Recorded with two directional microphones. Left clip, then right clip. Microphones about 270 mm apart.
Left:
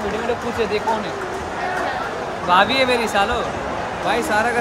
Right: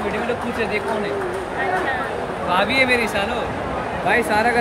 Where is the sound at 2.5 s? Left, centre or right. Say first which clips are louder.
Left 2 dB; centre.